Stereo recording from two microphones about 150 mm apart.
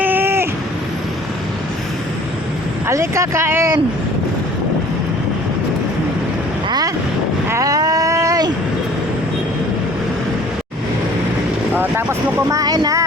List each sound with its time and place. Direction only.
0.0 s vehicle: 15° right (ahead or behind)
2.8 s speech: 20° right (ahead or behind)
6.7 s wind noise: 25° right (ahead or behind)
7.4 s vehicle: 20° right (ahead or behind)
11.7 s vehicle: 15° right (ahead or behind)
12.5 s a sound: 25° right (ahead or behind)